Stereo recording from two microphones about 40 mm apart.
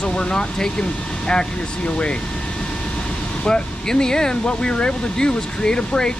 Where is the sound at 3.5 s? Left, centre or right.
Centre.